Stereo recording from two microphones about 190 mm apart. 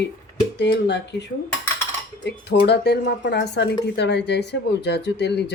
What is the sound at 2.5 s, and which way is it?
Speech, 60° left (ahead or behind).